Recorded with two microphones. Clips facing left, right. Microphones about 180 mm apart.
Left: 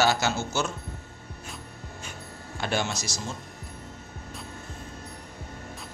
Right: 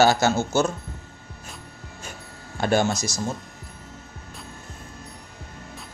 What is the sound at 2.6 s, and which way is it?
Speech, 45° right (ahead or behind).